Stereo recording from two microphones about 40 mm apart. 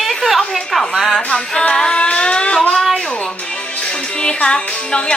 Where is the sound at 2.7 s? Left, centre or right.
Centre.